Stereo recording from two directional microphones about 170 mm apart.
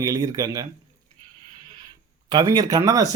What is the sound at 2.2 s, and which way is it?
Speech, 25° right (ahead or behind).